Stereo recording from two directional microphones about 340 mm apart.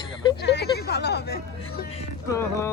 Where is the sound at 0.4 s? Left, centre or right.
Left.